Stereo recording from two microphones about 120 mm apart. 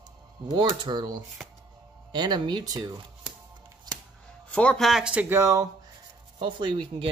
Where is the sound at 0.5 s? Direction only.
40° right (ahead or behind).